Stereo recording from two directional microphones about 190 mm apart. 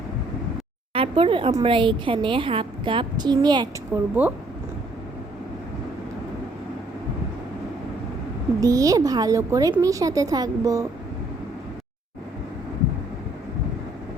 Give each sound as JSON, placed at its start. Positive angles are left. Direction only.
{"t": 0.9, "sound": "a woman's voice", "side_deg": -30}
{"t": 8.6, "sound": "a woman's voice", "side_deg": -20}